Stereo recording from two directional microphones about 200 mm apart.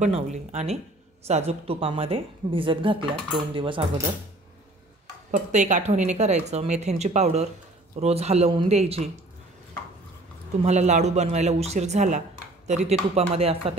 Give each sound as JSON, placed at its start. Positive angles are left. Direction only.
{"t": 0.0, "sound": "a woman's voice", "side_deg": -35}
{"t": 5.3, "sound": "speech", "side_deg": -40}
{"t": 10.6, "sound": "speech", "side_deg": -35}